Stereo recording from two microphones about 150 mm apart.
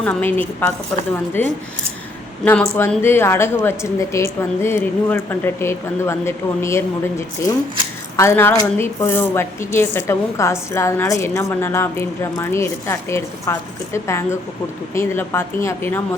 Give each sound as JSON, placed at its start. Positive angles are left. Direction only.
{"t": 0.0, "sound": "speech", "side_deg": 10}
{"t": 2.4, "sound": "speech", "side_deg": 10}